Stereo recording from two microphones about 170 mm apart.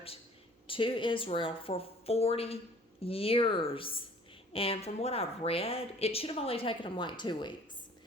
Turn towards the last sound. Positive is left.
turn(degrees=25)  # may be behind; listen again after turning